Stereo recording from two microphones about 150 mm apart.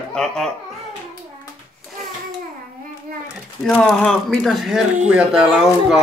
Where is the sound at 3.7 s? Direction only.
5° left (ahead or behind).